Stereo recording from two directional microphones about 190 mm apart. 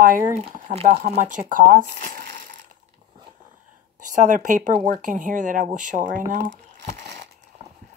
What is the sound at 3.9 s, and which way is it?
Speech, 45° right (ahead or behind).